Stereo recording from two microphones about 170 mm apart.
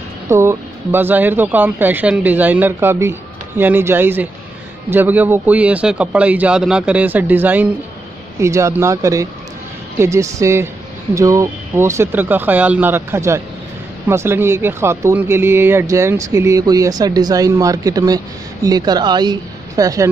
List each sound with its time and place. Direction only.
0.3 s speech: 15° right (ahead or behind)